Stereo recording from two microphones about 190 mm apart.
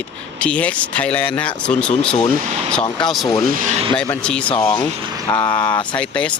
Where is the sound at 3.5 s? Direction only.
45° right (ahead or behind).